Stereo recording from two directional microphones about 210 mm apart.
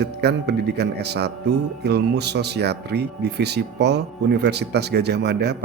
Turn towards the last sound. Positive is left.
turn(degrees=-50)  # may be behind; listen again after turning